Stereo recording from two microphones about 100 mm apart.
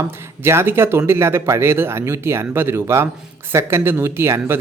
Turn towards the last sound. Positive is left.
turn(degrees=-25)  # may be behind; listen again after turning